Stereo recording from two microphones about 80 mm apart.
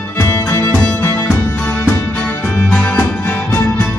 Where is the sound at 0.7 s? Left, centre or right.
Centre.